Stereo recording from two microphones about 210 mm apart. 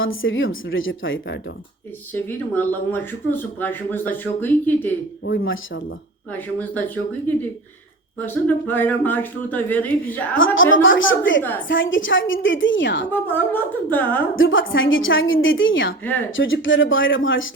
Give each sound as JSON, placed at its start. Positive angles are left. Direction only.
{"t": 0.0, "sound": "a woman's voice", "side_deg": 70}
{"t": 2.1, "sound": "speech", "side_deg": 10}
{"t": 5.2, "sound": "a woman's voice", "side_deg": 65}
{"t": 6.3, "sound": "speech", "side_deg": 10}
{"t": 10.3, "sound": "a woman's voice", "side_deg": 70}
{"t": 13.1, "sound": "speech", "side_deg": 10}
{"t": 14.3, "sound": "a woman's voice", "side_deg": 70}